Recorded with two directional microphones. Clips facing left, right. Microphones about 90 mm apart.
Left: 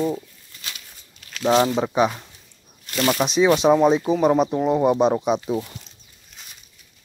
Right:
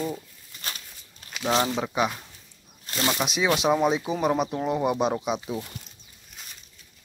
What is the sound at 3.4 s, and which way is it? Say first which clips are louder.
Speech: left 6 dB; 30° left (ahead or behind).